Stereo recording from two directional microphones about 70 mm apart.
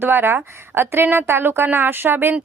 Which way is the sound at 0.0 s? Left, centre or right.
Right.